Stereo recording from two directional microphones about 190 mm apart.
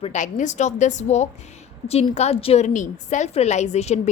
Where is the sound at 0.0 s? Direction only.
40° left (ahead or behind).